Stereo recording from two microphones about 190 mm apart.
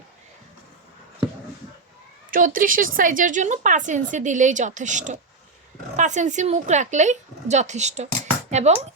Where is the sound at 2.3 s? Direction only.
45° right (ahead or behind).